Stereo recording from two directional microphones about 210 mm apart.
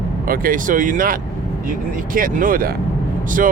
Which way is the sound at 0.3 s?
40° right (ahead or behind).